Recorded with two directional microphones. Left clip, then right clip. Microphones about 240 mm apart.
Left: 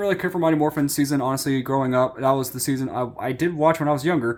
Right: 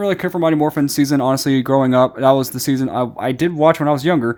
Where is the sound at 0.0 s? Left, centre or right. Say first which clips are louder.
Right 4 dB; right.